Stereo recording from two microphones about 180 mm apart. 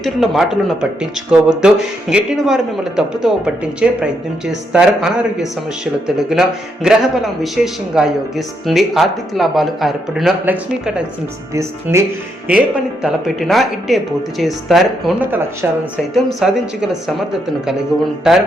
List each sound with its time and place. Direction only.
0.0 s speech: centre (ahead or behind)
12.5 s speech: 5° right (ahead or behind)
18.2 s speech: centre (ahead or behind)